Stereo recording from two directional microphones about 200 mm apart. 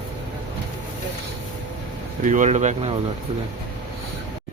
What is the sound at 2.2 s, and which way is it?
Speech, 40° right (ahead or behind).